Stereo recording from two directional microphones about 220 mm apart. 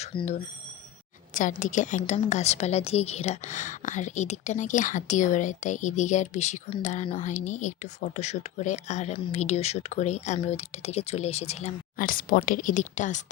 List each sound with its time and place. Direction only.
0.0 s speech: 25° left (ahead or behind)
1.3 s a woman's voice: 35° left (ahead or behind)